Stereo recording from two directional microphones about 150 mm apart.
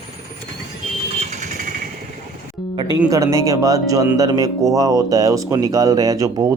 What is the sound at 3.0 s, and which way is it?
Speech, 20° right (ahead or behind).